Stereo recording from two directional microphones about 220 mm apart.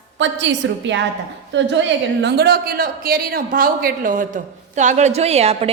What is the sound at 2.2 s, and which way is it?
A man's voice, 50° right (ahead or behind).